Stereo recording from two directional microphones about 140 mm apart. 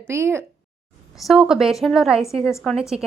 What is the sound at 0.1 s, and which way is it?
Speech, 15° right (ahead or behind).